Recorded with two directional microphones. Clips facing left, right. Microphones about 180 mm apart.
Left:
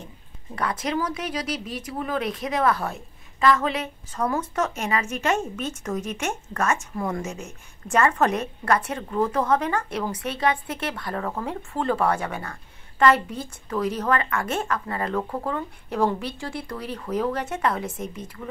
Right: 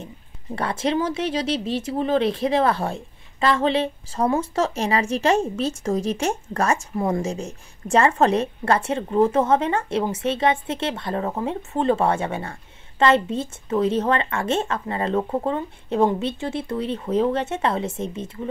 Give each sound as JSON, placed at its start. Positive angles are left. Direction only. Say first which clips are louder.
{"t": 0.6, "sound": "speech", "louder": "right 3 dB", "side_deg": -30}